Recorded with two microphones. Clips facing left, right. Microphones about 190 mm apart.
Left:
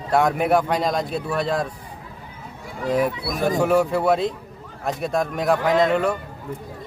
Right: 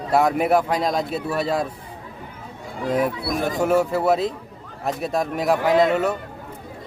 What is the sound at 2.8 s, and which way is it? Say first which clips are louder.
Speech: even; centre (ahead or behind).